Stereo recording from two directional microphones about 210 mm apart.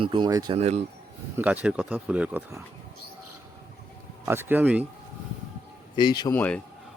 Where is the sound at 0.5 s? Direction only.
30° right (ahead or behind).